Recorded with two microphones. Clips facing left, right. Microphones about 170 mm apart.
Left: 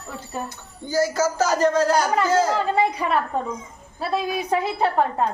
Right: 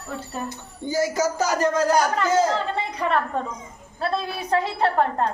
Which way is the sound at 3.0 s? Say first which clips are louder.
Even; 5° left (ahead or behind).